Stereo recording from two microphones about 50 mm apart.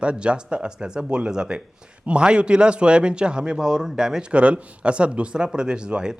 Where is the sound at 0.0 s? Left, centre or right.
Right.